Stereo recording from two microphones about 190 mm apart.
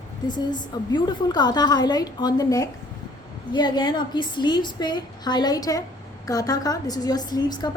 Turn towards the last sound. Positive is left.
turn(degrees=20)  # may be behind; listen again after turning